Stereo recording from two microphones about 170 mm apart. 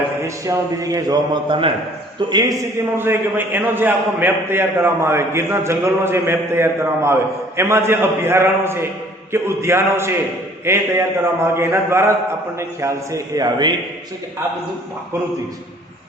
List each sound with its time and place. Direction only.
0.2 s a man's voice: 20° right (ahead or behind)